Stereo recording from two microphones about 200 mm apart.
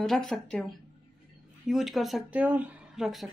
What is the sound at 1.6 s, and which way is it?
A woman's voice, centre (ahead or behind).